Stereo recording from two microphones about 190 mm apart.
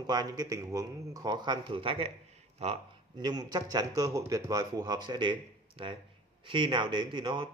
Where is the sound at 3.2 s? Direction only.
20° right (ahead or behind).